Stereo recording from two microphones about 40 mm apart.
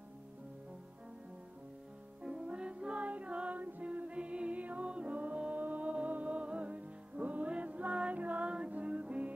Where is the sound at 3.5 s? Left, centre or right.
Right.